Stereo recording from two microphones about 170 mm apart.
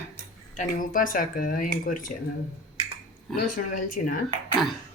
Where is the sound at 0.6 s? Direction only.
50° left (ahead or behind).